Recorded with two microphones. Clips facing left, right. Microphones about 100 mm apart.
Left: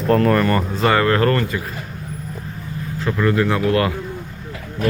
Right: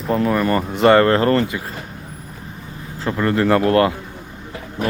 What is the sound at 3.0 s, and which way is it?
Speech, 35° right (ahead or behind).